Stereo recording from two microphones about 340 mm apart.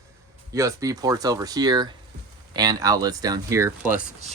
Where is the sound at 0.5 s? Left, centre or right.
Centre.